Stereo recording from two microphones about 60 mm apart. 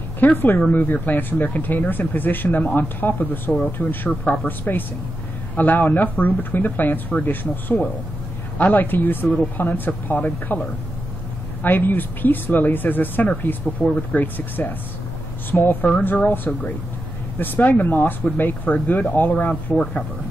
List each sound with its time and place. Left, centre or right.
0.2 s speech: left